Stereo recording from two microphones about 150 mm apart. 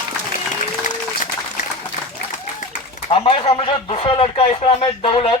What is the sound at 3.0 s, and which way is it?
Speech, 40° left (ahead or behind).